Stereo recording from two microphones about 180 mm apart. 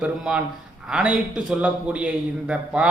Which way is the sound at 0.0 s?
5° right (ahead or behind).